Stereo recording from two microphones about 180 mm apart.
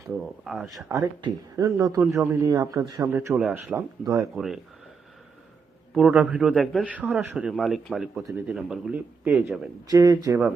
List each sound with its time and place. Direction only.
0.4 s a man's voice: centre (ahead or behind)
0.9 s speech: 20° right (ahead or behind)
3.1 s speech: 10° right (ahead or behind)
4.4 s a man's voice: centre (ahead or behind)
5.9 s a man's voice: 5° right (ahead or behind)
9.8 s speech: 20° right (ahead or behind)